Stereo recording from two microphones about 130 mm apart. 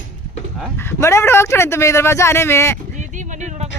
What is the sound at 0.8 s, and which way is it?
Speech, 20° left (ahead or behind).